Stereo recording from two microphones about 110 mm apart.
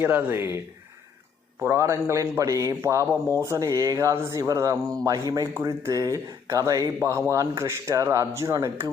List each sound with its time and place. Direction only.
0.0 s speech: 15° right (ahead or behind)